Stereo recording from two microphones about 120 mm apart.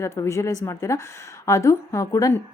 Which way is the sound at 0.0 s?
25° left (ahead or behind).